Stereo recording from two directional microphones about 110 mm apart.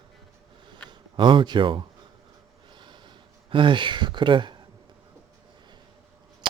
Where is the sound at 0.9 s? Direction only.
45° right (ahead or behind).